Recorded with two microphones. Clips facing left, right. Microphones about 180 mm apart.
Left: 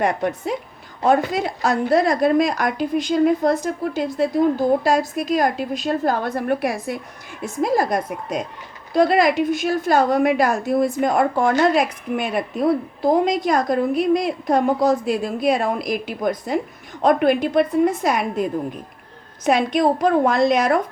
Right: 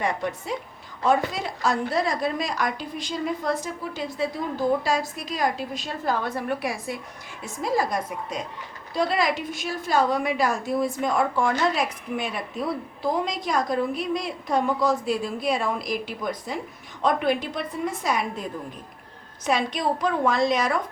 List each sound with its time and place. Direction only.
0.0 s a woman's voice: 50° left (ahead or behind)
19.5 s a woman's voice: 50° left (ahead or behind)